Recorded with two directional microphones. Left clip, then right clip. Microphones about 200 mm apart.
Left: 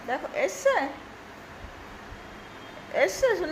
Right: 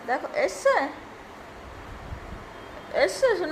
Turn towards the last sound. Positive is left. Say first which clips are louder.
# right 1 dB
turn(degrees=-15)  # may be behind; listen again after turning